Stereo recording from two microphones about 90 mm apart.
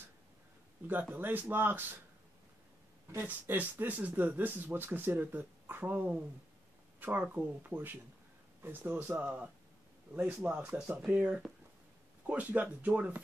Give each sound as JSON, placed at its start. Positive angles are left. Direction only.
{"t": 1.1, "sound": "speech", "side_deg": -20}
{"t": 3.2, "sound": "speech", "side_deg": -20}